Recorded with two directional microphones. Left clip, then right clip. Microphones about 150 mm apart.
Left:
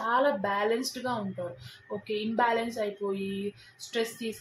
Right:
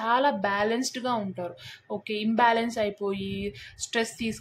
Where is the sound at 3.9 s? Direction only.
45° right (ahead or behind).